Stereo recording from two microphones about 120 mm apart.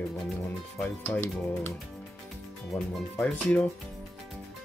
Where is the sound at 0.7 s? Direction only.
15° left (ahead or behind).